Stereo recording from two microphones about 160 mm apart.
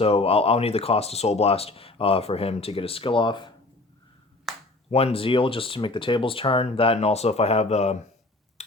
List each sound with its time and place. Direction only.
0.0 s speech: 40° left (ahead or behind)
4.5 s finger snapping: centre (ahead or behind)
4.9 s speech: 40° left (ahead or behind)